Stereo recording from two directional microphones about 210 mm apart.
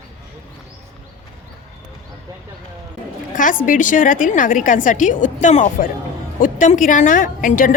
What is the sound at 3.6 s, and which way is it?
A woman's voice, 40° left (ahead or behind).